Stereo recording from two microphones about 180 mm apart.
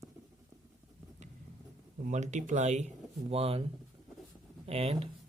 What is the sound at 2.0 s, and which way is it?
Speech, 40° right (ahead or behind).